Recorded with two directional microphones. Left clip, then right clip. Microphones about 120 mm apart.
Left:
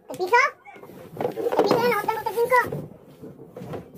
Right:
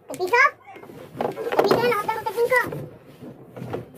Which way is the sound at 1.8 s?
55° left (ahead or behind).